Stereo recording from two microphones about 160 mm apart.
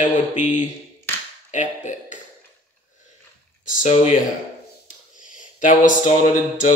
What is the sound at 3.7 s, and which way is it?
Speech, 55° left (ahead or behind).